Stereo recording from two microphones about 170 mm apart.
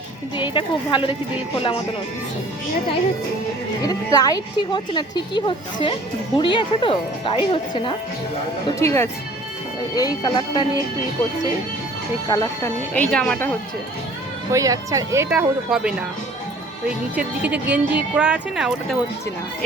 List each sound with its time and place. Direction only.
0.3 s speech: 30° left (ahead or behind)
3.8 s speech: 25° left (ahead or behind)
8.8 s speech: 15° left (ahead or behind)
12.3 s speech: 20° left (ahead or behind)
12.9 s speech: 5° left (ahead or behind)
14.5 s speech: 20° right (ahead or behind)
15.3 s speech: 5° right (ahead or behind)
17.2 s speech: 10° right (ahead or behind)